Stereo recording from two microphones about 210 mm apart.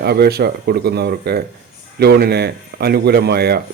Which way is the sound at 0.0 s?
50° right (ahead or behind).